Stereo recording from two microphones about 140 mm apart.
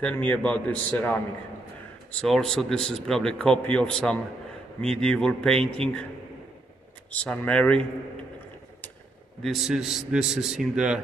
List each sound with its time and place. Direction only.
0.0 s a man's voice: 10° left (ahead or behind)
2.2 s a man's voice: centre (ahead or behind)
7.1 s a man's voice: 10° left (ahead or behind)
9.4 s a man's voice: centre (ahead or behind)